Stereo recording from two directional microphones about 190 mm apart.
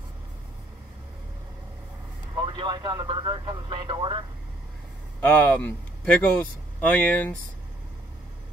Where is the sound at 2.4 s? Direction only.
25° right (ahead or behind).